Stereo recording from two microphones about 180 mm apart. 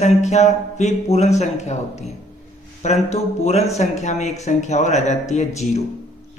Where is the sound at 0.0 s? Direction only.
40° left (ahead or behind).